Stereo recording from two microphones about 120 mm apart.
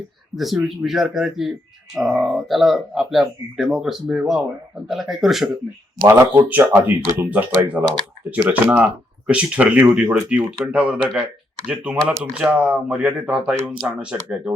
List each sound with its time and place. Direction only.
0.3 s speech: centre (ahead or behind)
6.1 s speech: 20° right (ahead or behind)